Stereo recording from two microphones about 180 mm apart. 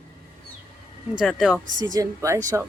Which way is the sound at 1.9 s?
20° right (ahead or behind).